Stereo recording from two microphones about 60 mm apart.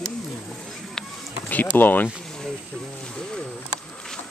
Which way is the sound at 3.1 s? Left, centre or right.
Centre.